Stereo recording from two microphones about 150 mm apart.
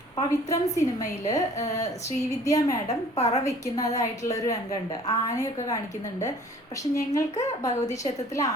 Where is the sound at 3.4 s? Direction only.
20° left (ahead or behind).